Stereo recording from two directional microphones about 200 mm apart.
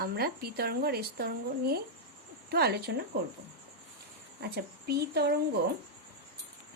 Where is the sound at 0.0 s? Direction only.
50° right (ahead or behind).